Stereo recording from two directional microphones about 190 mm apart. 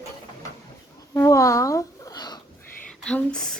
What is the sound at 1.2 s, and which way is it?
Speech, 15° left (ahead or behind).